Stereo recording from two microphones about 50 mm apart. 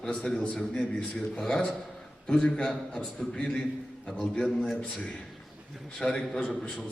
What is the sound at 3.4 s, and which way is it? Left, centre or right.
A man's voice, left.